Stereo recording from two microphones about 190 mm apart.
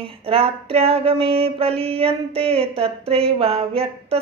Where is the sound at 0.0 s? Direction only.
30° right (ahead or behind).